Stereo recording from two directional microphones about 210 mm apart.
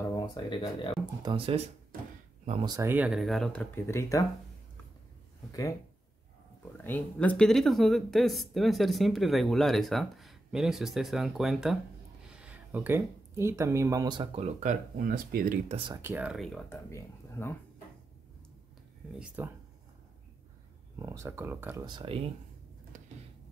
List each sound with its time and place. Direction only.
0.1 s speech: 20° left (ahead or behind)
1.2 s speech: 25° right (ahead or behind); by 4.2 s 15° left (ahead or behind)
5.5 s speech: 15° left (ahead or behind)
6.8 s speech: 10° left (ahead or behind); by 15.6 s 45° right (ahead or behind)
15.7 s speech: 25° right (ahead or behind)
16.0 s speech: 10° right (ahead or behind)
16.6 s speech: 10° left (ahead or behind)
19.1 s speech: 5° right (ahead or behind)
21.0 s speech: 15° right (ahead or behind)
21.8 s speech: 25° right (ahead or behind)
22.9 s a sound: 35° right (ahead or behind)